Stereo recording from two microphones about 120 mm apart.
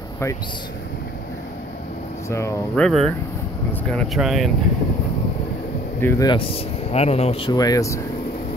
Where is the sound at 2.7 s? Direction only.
5° left (ahead or behind).